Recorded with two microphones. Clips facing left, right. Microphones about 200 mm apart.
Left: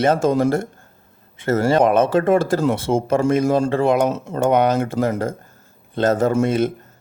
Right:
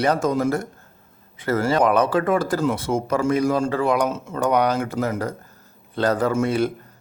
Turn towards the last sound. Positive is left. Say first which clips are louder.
# left 3 dB
turn(degrees=20)  # may be behind; listen again after turning